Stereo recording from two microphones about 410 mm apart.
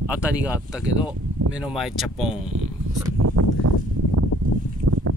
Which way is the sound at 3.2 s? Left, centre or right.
Right.